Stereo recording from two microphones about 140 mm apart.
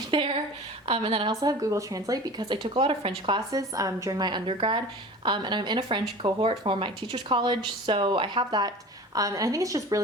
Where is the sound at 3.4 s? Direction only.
25° right (ahead or behind).